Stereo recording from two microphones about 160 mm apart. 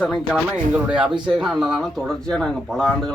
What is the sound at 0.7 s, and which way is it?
Speech, 5° right (ahead or behind).